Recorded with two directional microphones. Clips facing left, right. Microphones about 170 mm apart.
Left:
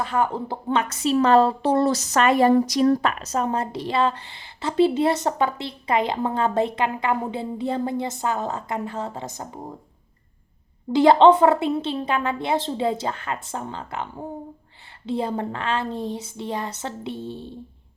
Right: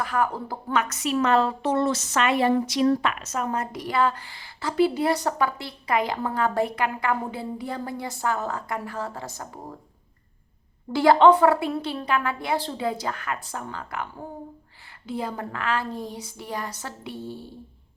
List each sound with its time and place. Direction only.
0.0 s a woman's voice: 25° left (ahead or behind)
10.9 s a woman's voice: 25° left (ahead or behind)